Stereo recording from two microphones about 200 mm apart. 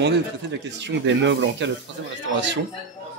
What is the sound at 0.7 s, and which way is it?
Speech, 60° right (ahead or behind).